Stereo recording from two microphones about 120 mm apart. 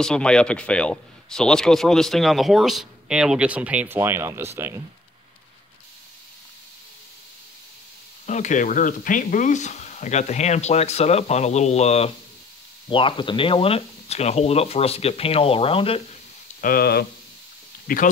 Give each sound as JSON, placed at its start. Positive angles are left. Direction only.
{"t": 0.0, "sound": "speech", "side_deg": 5}
{"t": 8.3, "sound": "speech", "side_deg": 90}
{"t": 12.9, "sound": "speech", "side_deg": 45}